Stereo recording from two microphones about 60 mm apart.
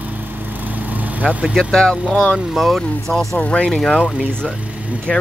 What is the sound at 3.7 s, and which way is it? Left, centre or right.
Speech, centre.